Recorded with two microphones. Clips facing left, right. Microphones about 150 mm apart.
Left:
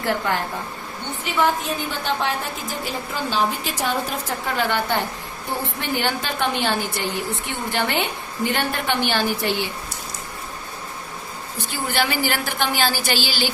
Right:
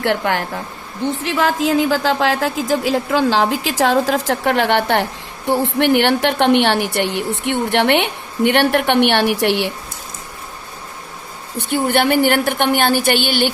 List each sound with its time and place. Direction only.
0.0 s a woman's voice: 75° right (ahead or behind)
1.2 s a woman's voice: 90° right
11.5 s a woman's voice: 60° right (ahead or behind)